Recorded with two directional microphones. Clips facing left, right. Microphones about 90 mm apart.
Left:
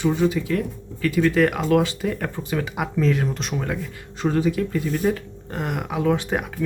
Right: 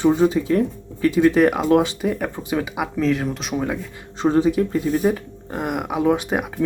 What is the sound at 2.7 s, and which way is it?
Speech, centre (ahead or behind).